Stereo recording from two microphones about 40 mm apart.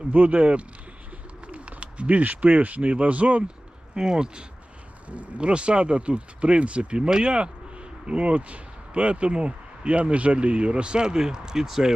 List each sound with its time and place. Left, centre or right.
0.1 s speech: right
3.9 s speech: centre
5.0 s speech: right; by 12.0 s centre